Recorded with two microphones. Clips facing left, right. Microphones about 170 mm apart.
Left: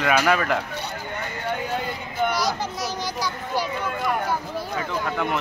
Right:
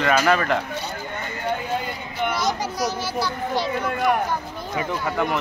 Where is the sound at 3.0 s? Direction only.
15° left (ahead or behind).